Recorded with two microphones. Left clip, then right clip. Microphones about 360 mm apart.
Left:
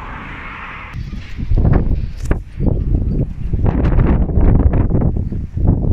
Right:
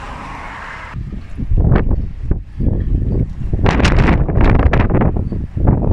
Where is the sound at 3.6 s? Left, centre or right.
Right.